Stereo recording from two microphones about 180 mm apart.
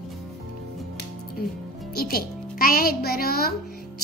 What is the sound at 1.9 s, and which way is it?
Speech, 55° left (ahead or behind).